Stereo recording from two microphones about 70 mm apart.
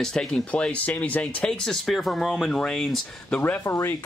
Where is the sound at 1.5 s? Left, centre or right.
Centre.